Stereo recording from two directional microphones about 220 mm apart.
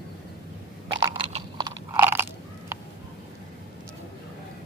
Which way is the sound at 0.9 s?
20° right (ahead or behind).